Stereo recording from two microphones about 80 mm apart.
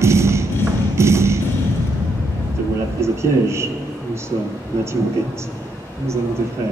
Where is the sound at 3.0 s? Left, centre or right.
Right.